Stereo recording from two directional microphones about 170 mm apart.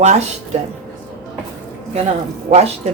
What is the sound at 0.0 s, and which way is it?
Speech, 45° right (ahead or behind).